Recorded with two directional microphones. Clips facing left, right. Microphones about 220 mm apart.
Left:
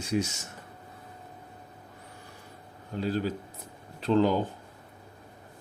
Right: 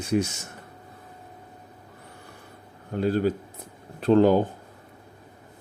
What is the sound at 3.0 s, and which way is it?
Speech, 50° right (ahead or behind).